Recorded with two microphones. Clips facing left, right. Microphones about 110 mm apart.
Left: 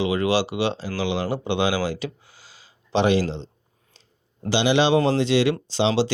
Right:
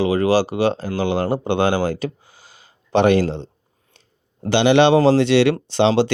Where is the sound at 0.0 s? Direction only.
40° right (ahead or behind).